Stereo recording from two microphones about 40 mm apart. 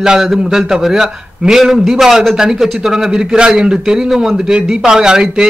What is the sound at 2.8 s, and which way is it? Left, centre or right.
A man's voice, centre.